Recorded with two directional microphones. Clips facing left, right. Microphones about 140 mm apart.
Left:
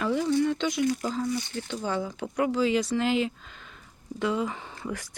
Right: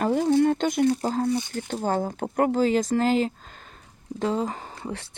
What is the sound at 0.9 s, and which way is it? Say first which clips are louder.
Speech: right 4 dB; 30° right (ahead or behind).